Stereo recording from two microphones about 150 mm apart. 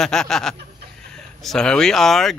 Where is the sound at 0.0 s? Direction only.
5° left (ahead or behind).